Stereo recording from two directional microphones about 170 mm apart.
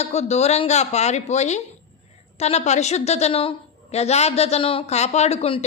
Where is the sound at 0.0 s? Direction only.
40° left (ahead or behind).